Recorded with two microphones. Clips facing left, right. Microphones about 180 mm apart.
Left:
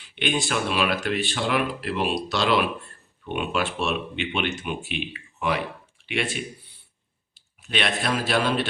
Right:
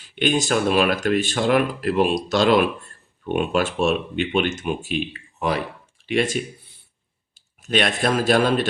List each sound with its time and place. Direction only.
0.0 s a man's voice: 40° right (ahead or behind)